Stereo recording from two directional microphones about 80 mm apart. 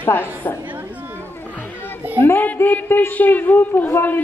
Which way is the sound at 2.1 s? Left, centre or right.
Left.